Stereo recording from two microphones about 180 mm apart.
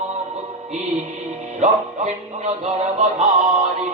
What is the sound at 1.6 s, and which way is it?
Music, 40° right (ahead or behind).